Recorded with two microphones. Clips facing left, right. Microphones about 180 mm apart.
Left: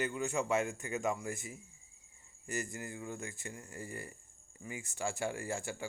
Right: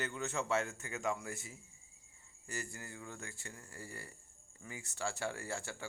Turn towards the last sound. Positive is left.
turn(degrees=15)  # may be behind; listen again after turning